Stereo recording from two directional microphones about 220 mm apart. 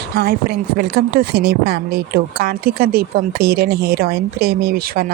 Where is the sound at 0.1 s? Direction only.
45° right (ahead or behind).